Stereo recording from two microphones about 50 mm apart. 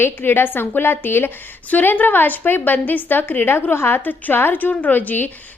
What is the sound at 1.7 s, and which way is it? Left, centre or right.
A woman's voice, left.